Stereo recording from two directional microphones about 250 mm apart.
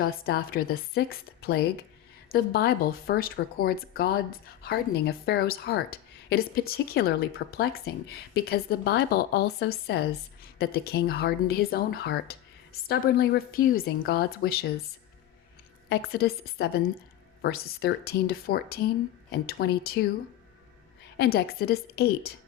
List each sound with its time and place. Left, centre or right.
0.0 s speech: left
15.9 s speech: left
21.2 s speech: left